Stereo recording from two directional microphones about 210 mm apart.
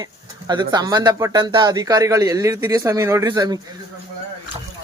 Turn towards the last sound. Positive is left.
turn(degrees=-20)  # may be behind; listen again after turning